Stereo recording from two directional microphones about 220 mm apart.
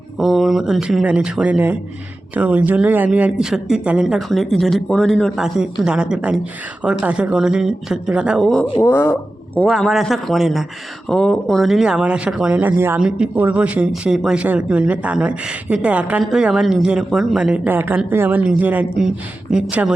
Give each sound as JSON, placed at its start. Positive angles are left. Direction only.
{"t": 0.2, "sound": "speech", "side_deg": 0}